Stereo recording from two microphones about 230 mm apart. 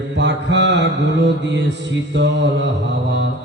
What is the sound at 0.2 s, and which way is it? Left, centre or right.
Mantra, right.